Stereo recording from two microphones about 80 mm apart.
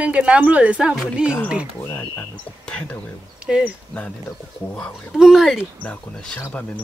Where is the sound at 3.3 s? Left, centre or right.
Centre.